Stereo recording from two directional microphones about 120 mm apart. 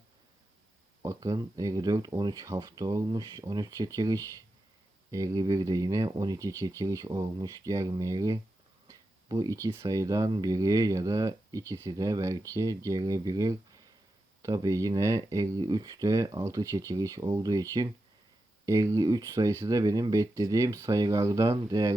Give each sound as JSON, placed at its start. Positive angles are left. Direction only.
{"t": 1.0, "sound": "speech", "side_deg": -25}
{"t": 8.9, "sound": "a sound", "side_deg": -30}
{"t": 9.7, "sound": "speech", "side_deg": -30}